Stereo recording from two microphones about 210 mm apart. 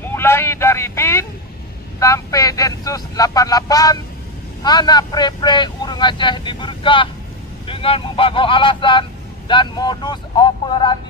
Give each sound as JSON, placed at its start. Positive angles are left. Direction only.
{"t": 0.1, "sound": "vehicle", "side_deg": 10}
{"t": 2.0, "sound": "speech", "side_deg": 15}